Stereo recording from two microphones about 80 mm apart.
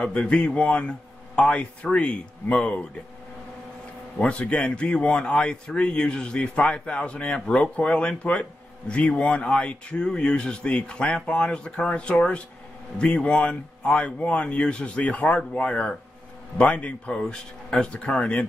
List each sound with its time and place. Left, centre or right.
0.0 s speech: centre
4.2 s speech: centre